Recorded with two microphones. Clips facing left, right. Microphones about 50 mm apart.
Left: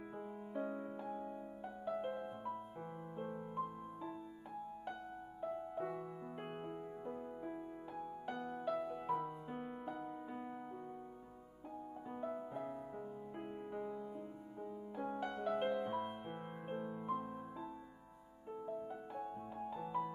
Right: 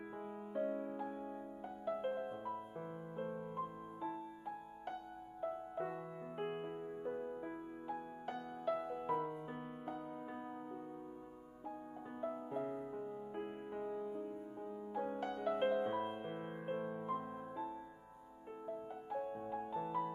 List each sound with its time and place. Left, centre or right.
0.5 s music: centre
5.4 s music: right
12.2 s music: centre
19.1 s music: centre